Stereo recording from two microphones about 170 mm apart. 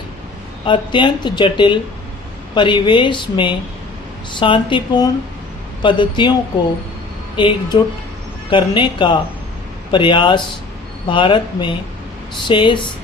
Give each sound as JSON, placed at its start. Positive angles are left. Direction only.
{"t": 0.6, "sound": "speech", "side_deg": 30}
{"t": 7.3, "sound": "speech", "side_deg": 30}